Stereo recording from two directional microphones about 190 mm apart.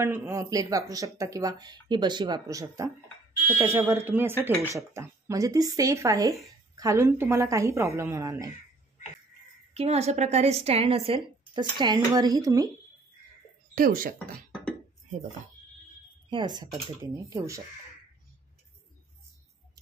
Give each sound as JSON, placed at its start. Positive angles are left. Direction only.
{"t": 0.0, "sound": "speech", "side_deg": -15}
{"t": 9.8, "sound": "a woman's voice", "side_deg": -35}
{"t": 13.7, "sound": "speech", "side_deg": -50}
{"t": 16.3, "sound": "speech", "side_deg": -25}